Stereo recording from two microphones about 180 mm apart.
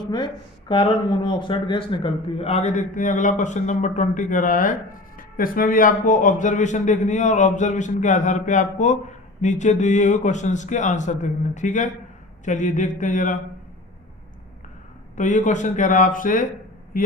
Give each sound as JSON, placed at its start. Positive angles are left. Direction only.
{"t": 0.7, "sound": "a man's voice", "side_deg": 25}
{"t": 15.1, "sound": "a man's voice", "side_deg": 45}
{"t": 16.9, "sound": "a sound", "side_deg": 50}